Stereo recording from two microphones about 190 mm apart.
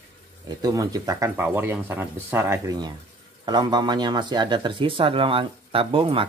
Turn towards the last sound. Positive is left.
turn(degrees=-30)  # may be behind; listen again after turning